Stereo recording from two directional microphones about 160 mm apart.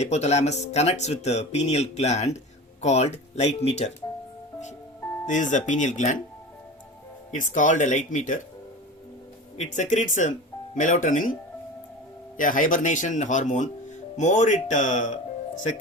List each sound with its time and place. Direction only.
0.0 s speech: 45° left (ahead or behind)
5.2 s speech: 50° left (ahead or behind)
7.3 s speech: 50° left (ahead or behind)
9.6 s speech: 50° left (ahead or behind)
12.4 s speech: 55° left (ahead or behind)